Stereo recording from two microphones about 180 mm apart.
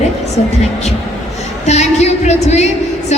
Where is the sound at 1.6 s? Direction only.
40° left (ahead or behind).